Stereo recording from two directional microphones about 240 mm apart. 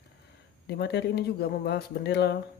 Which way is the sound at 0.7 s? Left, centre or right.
Left.